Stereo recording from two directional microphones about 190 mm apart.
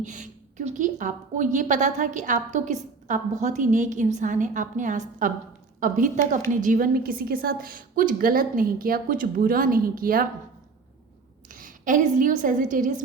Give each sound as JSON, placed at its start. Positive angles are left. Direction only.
{"t": 0.0, "sound": "a woman's voice", "side_deg": -40}
{"t": 11.4, "sound": "a woman's voice", "side_deg": -45}